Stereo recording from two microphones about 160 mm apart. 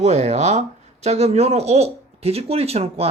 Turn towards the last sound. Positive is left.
turn(degrees=-40)  # may be behind; listen again after turning